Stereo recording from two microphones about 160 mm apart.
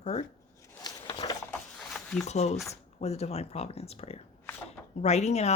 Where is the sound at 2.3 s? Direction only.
45° left (ahead or behind).